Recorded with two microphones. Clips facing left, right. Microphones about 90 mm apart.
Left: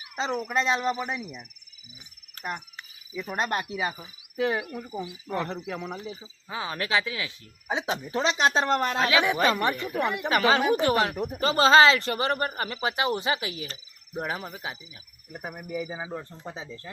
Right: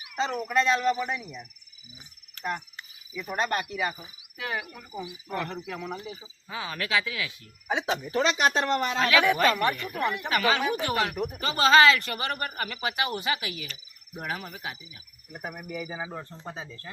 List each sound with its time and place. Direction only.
0.0 s a sound: 25° left (ahead or behind)
0.3 s speech: 20° left (ahead or behind)
2.4 s music: 35° left (ahead or behind)
3.2 s speech: 15° left (ahead or behind)
8.7 s speech: 50° left (ahead or behind)
9.0 s speech: 20° left (ahead or behind)